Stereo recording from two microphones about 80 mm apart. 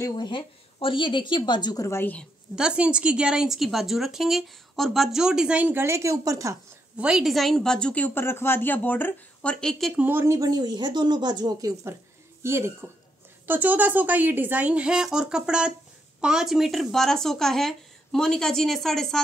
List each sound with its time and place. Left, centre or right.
0.1 s speech: left
1.8 s a woman's voice: left
2.5 s a woman's voice: centre
5.8 s speech: right
7.0 s a woman's voice: centre
7.3 s speech: centre
9.7 s speech: centre
9.9 s speech: right
10.2 s speech: right
10.5 s speech: right
12.4 s speech: right
13.5 s speech: right; by 19.2 s centre